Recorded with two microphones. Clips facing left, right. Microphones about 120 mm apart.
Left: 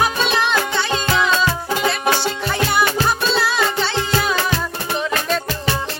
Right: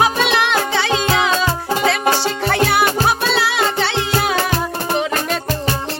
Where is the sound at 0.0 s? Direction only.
75° right (ahead or behind).